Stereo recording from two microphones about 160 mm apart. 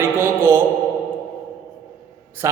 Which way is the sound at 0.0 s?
15° right (ahead or behind).